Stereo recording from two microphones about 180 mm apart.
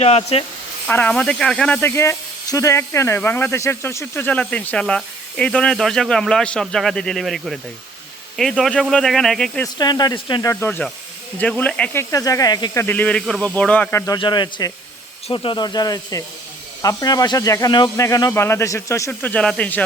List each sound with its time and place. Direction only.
0.0 s speech: 35° left (ahead or behind)
0.9 s speech: 10° left (ahead or behind)
9.7 s speech: 25° left (ahead or behind)
10.5 s speech: 10° left (ahead or behind)
12.1 s speech: 20° left (ahead or behind)